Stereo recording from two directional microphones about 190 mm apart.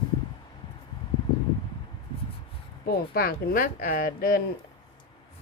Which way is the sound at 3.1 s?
50° left (ahead or behind).